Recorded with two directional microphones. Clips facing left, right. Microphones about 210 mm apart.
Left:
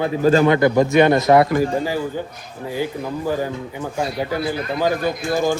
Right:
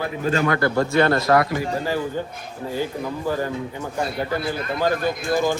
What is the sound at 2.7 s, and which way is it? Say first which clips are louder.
Speech: left 2 dB; 15° left (ahead or behind).